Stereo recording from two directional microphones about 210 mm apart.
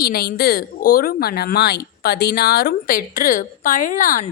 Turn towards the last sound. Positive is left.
turn(degrees=40)  # may be behind; listen again after turning